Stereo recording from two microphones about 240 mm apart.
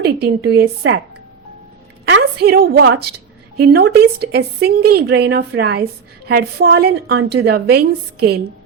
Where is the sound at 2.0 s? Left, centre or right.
Right.